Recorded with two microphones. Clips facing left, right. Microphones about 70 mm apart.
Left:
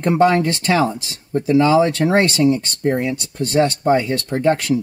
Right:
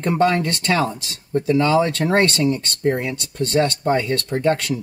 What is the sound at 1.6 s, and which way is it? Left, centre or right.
Speech, centre.